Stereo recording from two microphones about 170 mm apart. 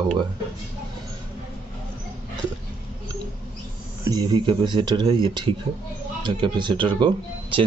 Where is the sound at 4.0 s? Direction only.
20° right (ahead or behind).